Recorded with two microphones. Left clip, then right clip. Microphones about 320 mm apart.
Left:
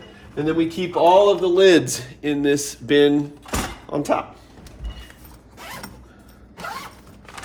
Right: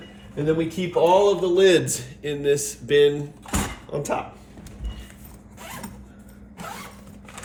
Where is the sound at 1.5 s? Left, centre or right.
Centre.